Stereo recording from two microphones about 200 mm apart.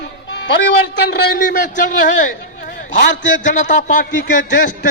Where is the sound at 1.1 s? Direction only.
55° left (ahead or behind).